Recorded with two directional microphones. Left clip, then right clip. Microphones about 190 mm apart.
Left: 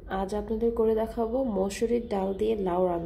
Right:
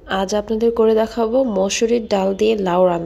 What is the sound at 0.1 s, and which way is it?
A woman's voice, 15° right (ahead or behind).